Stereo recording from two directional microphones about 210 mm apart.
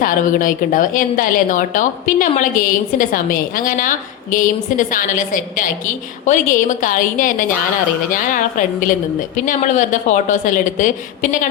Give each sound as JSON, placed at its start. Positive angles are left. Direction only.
{"t": 0.0, "sound": "a woman's voice", "side_deg": 40}